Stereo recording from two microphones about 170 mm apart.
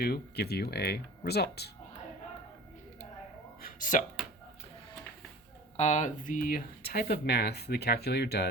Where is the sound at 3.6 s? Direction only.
50° left (ahead or behind).